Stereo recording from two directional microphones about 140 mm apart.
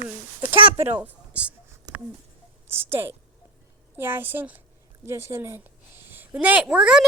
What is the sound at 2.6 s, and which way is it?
A woman's voice, 15° right (ahead or behind).